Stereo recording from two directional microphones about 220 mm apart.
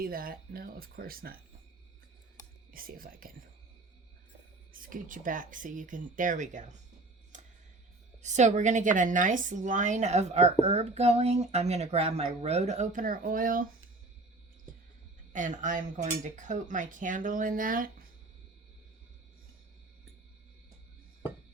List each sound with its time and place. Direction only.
0.0 s a woman's voice: 40° right (ahead or behind)
2.7 s a woman's voice: 40° right (ahead or behind)
4.7 s a woman's voice: 40° right (ahead or behind)
8.2 s a woman's voice: 30° right (ahead or behind)
15.3 s a woman's voice: 35° right (ahead or behind)